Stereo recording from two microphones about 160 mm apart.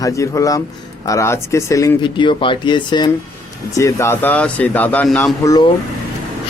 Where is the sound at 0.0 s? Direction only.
20° left (ahead or behind).